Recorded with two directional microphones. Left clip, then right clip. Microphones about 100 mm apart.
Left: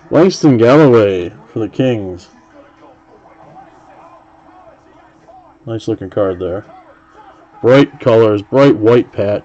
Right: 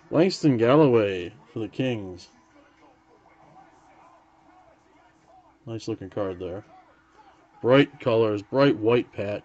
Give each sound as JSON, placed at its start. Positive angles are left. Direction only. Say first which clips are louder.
{"t": 0.1, "sound": "speech", "louder": "left 12 dB", "side_deg": 5}
{"t": 1.0, "sound": "speech", "louder": "left 13 dB", "side_deg": -5}
{"t": 5.7, "sound": "speech", "louder": "left 13 dB", "side_deg": -15}
{"t": 7.7, "sound": "speech", "louder": "left 11 dB", "side_deg": 5}